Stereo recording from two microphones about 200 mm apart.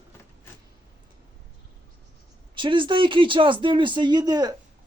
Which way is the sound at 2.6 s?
25° right (ahead or behind).